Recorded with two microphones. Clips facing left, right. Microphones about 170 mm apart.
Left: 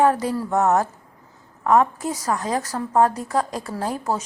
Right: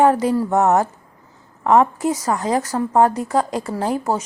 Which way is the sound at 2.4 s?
80° right.